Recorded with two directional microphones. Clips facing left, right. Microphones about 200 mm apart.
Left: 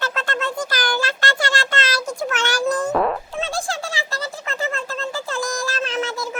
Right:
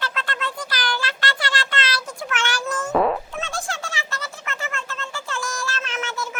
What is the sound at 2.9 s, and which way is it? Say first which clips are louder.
Fart: right 1 dB; centre (ahead or behind).